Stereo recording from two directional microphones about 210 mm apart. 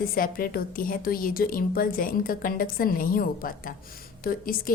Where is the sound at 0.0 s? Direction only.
45° left (ahead or behind).